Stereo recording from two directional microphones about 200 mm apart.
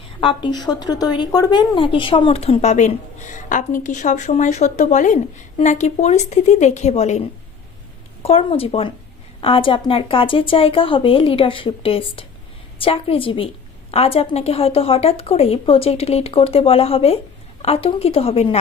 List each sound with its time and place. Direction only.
0.0 s a woman's voice: 25° left (ahead or behind)
8.2 s speech: 30° left (ahead or behind)